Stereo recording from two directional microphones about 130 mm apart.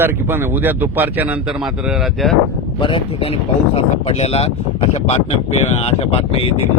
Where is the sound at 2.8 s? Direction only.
45° left (ahead or behind).